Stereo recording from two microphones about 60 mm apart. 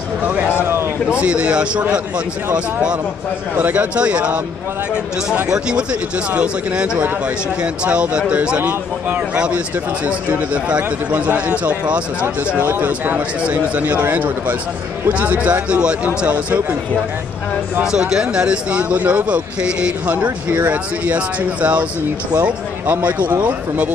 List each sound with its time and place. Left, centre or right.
1.1 s a man's voice: centre
5.5 s a man's voice: centre
17.9 s a man's voice: centre